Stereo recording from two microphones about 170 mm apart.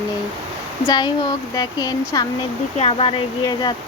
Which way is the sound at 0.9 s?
25° left (ahead or behind).